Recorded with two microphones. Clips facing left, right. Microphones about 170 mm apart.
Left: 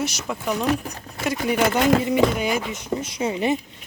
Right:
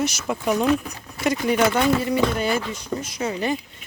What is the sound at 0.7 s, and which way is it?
Speech, 40° left (ahead or behind).